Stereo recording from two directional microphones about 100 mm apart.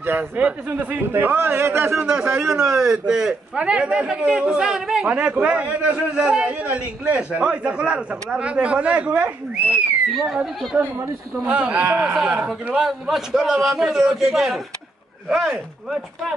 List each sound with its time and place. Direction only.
0.0 s a man's voice: 20° right (ahead or behind)
2.0 s a man's voice: 10° right (ahead or behind)
10.2 s a man's voice: 5° right (ahead or behind)